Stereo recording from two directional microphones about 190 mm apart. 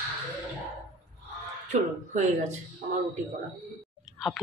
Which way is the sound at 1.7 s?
40° right (ahead or behind).